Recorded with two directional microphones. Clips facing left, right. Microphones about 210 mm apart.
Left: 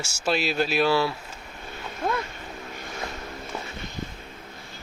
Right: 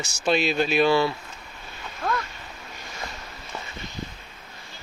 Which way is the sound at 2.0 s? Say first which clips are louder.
Left 1 dB; 20° left (ahead or behind).